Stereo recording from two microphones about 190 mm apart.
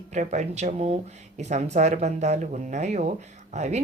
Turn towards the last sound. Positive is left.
turn(degrees=-35)  # may be behind; listen again after turning